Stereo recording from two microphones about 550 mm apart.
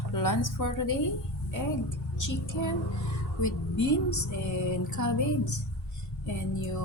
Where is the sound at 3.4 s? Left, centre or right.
Left.